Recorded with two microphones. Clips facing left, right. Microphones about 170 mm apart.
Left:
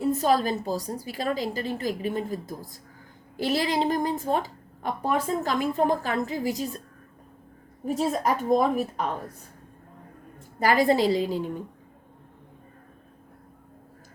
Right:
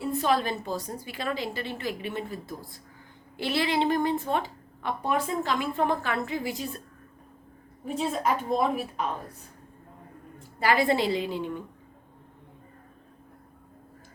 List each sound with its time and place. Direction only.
0.0 s a woman's voice: 40° left (ahead or behind)
7.9 s a woman's voice: 40° left (ahead or behind)
10.6 s a woman's voice: 40° left (ahead or behind)